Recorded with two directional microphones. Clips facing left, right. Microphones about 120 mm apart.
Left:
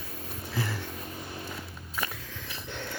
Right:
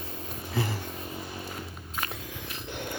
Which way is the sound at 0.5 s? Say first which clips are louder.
Right 2 dB; 45° right (ahead or behind).